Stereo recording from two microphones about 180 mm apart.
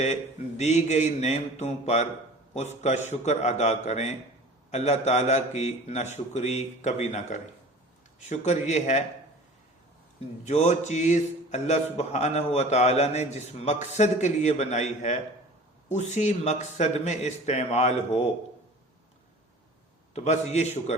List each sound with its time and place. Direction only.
0.0 s a man's voice: 40° left (ahead or behind)
10.4 s a man's voice: 40° left (ahead or behind)
20.1 s a man's voice: 40° left (ahead or behind)